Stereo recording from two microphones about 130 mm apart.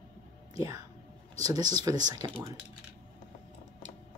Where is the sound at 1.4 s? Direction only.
30° right (ahead or behind).